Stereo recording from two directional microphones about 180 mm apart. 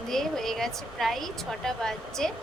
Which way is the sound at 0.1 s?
Centre (ahead or behind).